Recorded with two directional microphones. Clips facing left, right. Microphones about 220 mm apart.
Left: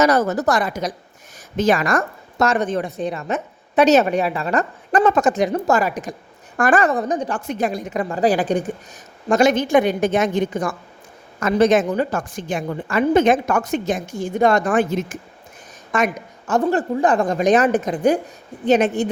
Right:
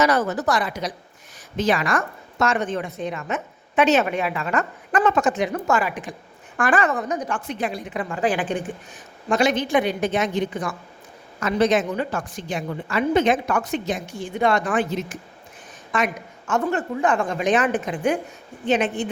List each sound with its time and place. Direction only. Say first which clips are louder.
0.0 s a woman's voice: left 4 dB; 40° left (ahead or behind)
16.5 s a woman's voice: left 4 dB; 35° left (ahead or behind)